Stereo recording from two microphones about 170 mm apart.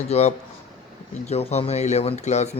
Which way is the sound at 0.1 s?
40° left (ahead or behind).